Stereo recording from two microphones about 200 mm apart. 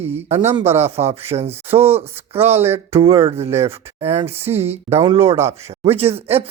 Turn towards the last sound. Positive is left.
turn(degrees=-30)  # may be behind; listen again after turning